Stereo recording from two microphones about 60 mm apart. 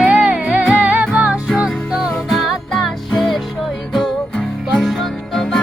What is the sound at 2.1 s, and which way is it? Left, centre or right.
Music, centre.